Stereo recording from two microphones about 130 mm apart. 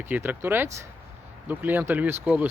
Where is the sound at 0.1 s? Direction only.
15° right (ahead or behind).